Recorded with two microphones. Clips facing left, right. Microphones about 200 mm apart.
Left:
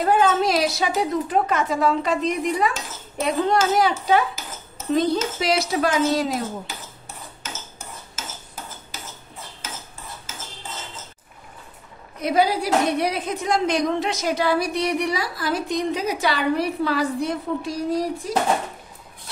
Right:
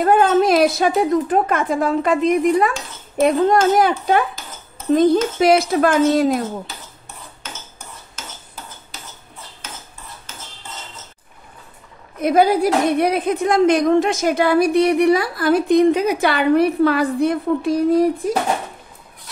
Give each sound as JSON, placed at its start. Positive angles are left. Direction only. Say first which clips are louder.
{"t": 0.0, "sound": "a woman's voice", "louder": "right 5 dB", "side_deg": -55}
{"t": 12.2, "sound": "a woman's voice", "louder": "right 6 dB", "side_deg": -50}